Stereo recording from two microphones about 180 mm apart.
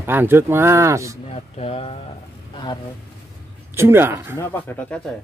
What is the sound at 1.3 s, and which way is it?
Speech, 35° left (ahead or behind).